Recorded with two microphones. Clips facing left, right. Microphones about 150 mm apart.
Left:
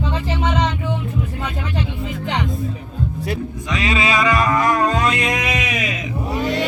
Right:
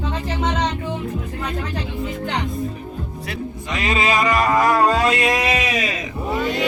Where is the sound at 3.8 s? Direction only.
45° right (ahead or behind).